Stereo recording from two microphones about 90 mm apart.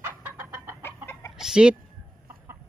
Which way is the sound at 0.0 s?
20° right (ahead or behind).